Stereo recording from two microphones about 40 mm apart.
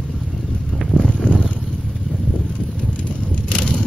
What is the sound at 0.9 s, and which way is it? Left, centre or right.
Purr, left.